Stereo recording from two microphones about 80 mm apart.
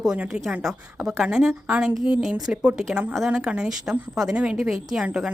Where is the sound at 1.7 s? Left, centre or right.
Centre.